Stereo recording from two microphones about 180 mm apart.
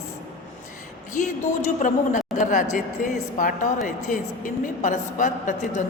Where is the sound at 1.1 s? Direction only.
45° left (ahead or behind).